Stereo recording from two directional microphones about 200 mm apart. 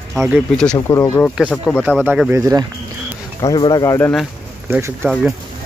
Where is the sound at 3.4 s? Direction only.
20° left (ahead or behind).